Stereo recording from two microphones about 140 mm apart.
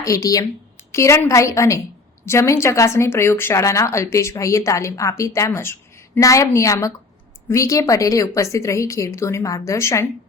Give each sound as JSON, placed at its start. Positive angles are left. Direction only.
{"t": 0.0, "sound": "speech", "side_deg": 25}